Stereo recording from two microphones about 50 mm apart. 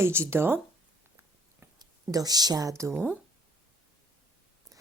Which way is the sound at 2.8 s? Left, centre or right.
Right.